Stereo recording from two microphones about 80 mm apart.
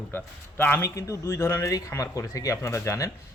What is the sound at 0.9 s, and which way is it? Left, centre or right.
A man's voice, left.